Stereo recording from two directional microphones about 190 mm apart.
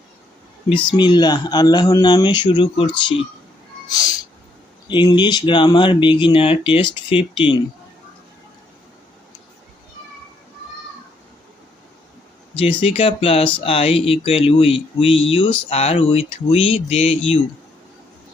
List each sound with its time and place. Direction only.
0.9 s speech: 25° left (ahead or behind)
3.8 s a sound: 20° left (ahead or behind)
4.9 s speech: 25° left (ahead or behind)
12.5 s speech: 30° left (ahead or behind)